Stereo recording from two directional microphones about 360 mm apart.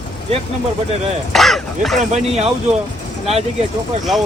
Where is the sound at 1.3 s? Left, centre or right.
Centre.